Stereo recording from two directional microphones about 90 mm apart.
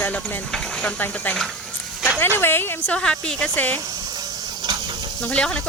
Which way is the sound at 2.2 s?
25° left (ahead or behind).